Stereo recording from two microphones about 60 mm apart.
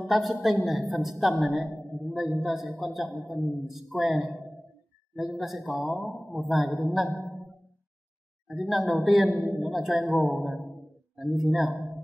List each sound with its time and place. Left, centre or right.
0.0 s a man's voice: centre
8.5 s a man's voice: centre
9.3 s a man's voice: centre
9.6 s a man's voice: centre